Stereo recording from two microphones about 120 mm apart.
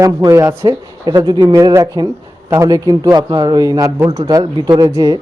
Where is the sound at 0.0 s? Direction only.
30° right (ahead or behind).